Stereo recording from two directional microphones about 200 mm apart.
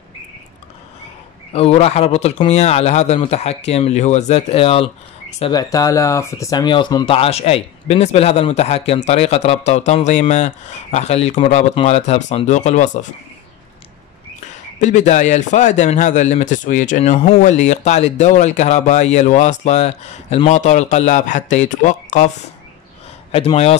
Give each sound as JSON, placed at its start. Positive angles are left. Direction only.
{"t": 1.5, "sound": "speech", "side_deg": 30}
{"t": 14.8, "sound": "speech", "side_deg": 35}
{"t": 23.3, "sound": "speech", "side_deg": 30}